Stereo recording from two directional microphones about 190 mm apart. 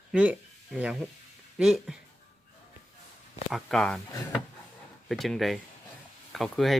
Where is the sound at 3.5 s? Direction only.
Centre (ahead or behind).